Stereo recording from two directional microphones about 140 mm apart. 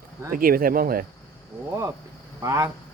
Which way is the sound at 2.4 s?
15° right (ahead or behind).